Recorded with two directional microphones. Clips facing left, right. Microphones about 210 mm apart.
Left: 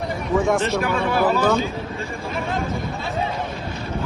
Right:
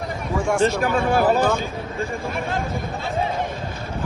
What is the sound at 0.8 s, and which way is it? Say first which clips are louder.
Speech: right 1 dB; 50° right (ahead or behind).